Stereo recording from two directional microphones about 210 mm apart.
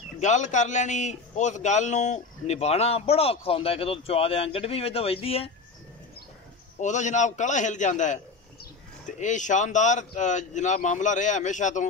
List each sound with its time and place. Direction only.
0.2 s a man's voice: 35° left (ahead or behind)
6.8 s speech: 35° left (ahead or behind)